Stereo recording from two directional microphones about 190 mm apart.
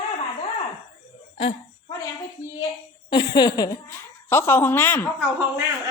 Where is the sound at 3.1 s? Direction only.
20° left (ahead or behind).